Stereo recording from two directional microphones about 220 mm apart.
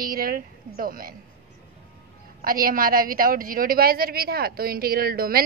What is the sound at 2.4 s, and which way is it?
A woman's voice, 40° right (ahead or behind).